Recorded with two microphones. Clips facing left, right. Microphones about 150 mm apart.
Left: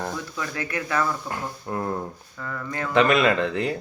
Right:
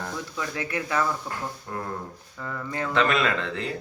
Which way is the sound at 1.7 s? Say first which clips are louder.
Left 7 dB; 25° left (ahead or behind).